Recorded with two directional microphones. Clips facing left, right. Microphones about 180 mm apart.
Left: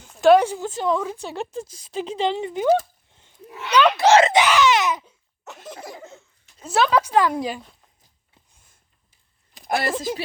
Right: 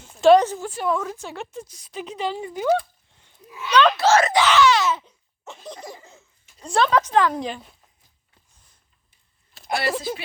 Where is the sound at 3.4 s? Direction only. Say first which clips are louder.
Even; 65° left (ahead or behind).